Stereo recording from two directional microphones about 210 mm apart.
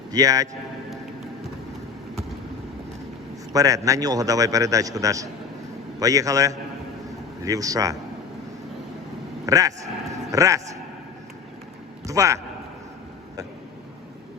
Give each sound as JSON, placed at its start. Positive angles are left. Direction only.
{"t": 0.1, "sound": "a man's voice", "side_deg": -15}
{"t": 3.5, "sound": "a man's voice", "side_deg": -15}
{"t": 9.5, "sound": "speech", "side_deg": -15}
{"t": 12.0, "sound": "a man's voice", "side_deg": -15}